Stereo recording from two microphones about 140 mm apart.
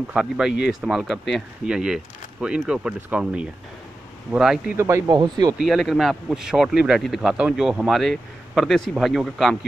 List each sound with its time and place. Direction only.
0.1 s speech: 5° right (ahead or behind)
4.7 s speech: 20° right (ahead or behind)
5.6 s speech: centre (ahead or behind)